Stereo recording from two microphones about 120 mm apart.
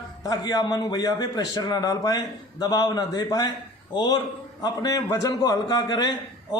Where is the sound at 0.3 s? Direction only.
30° left (ahead or behind).